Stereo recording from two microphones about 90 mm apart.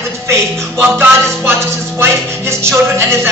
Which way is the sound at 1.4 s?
30° right (ahead or behind).